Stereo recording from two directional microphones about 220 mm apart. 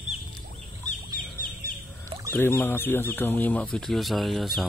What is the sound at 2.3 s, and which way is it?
Speech, 10° left (ahead or behind).